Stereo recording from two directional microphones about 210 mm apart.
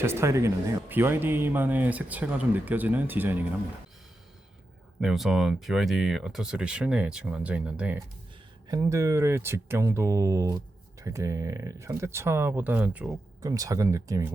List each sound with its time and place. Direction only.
0.0 s speech: 10° right (ahead or behind)
4.9 s speech: centre (ahead or behind)
8.6 s speech: 15° right (ahead or behind)